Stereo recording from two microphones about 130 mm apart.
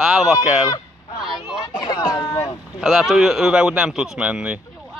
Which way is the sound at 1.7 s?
30° left (ahead or behind).